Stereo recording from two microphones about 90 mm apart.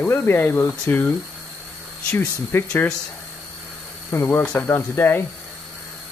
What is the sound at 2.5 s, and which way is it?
Speech, 30° left (ahead or behind).